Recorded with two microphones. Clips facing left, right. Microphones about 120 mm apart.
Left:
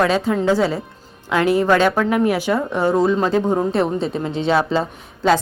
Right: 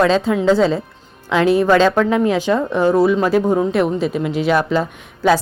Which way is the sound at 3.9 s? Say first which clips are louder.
Right 3 dB; 30° left (ahead or behind).